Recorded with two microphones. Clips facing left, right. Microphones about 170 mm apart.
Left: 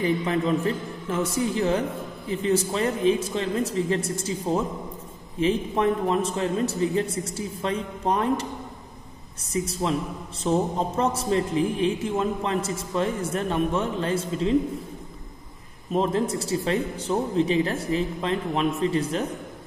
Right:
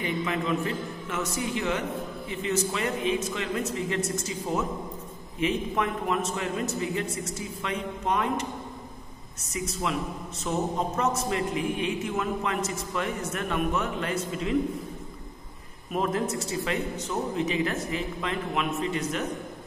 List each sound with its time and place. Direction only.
0.0 s a man's voice: 35° left (ahead or behind)
9.5 s a man's voice: 35° left (ahead or behind)
15.9 s a man's voice: 30° left (ahead or behind)